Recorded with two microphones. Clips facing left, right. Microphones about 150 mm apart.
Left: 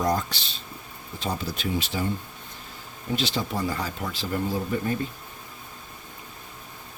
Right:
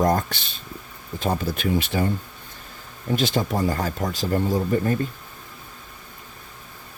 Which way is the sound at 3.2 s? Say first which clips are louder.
Right 5 dB; 45° right (ahead or behind).